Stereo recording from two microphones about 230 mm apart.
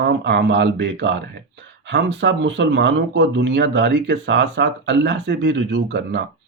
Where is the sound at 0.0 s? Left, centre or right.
Right.